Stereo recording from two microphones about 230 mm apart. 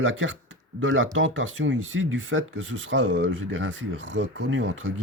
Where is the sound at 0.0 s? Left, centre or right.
Right.